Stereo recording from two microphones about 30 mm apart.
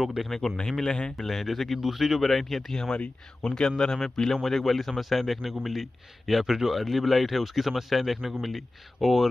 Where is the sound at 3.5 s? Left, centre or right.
Centre.